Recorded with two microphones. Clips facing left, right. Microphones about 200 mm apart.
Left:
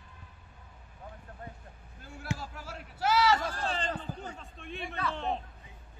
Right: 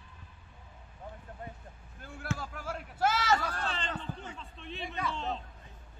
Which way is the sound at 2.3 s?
55° right (ahead or behind).